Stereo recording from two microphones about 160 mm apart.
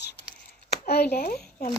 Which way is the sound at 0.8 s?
90° left.